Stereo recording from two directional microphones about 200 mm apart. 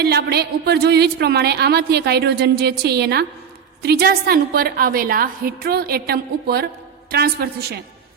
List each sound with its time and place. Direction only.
0.0 s a woman's voice: 55° right (ahead or behind)